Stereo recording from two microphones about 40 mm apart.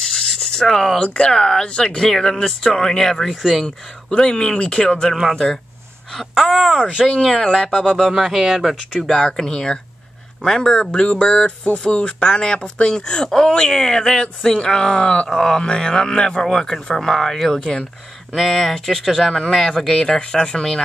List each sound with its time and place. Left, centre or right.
0.0 s writing: centre
1.2 s speech: centre
1.7 s speech: left
2.0 s speech: centre
3.6 s speech: left
6.3 s speech: centre
6.8 s speech: right
7.5 s speech: centre
8.1 s speech: centre
9.4 s speech: centre
15.2 s speech: centre
18.3 s speech: centre
20.1 s speech: centre